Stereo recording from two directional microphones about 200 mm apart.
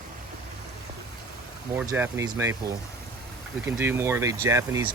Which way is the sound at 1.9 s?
10° right (ahead or behind).